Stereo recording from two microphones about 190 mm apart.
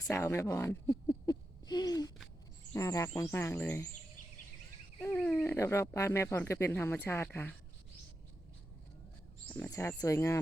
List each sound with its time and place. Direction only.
0.1 s speech: 15° left (ahead or behind)
4.9 s speech: 5° left (ahead or behind)
9.6 s speech: 15° left (ahead or behind)